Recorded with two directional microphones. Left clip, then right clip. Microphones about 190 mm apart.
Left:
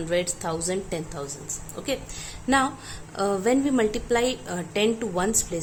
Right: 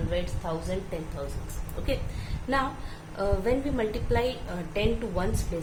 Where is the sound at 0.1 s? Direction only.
65° left (ahead or behind).